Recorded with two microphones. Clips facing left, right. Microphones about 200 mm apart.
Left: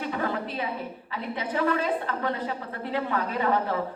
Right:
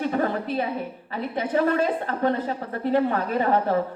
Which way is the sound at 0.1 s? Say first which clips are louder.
Right 5 dB; 40° right (ahead or behind).